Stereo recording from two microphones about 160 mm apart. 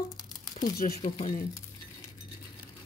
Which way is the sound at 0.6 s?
70° left (ahead or behind).